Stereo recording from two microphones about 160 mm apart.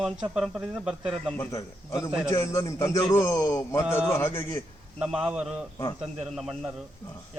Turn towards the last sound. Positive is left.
turn(degrees=0)  # may be behind; listen again after turning